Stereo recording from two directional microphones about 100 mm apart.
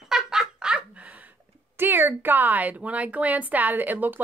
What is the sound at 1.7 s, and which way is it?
Speech, 20° right (ahead or behind).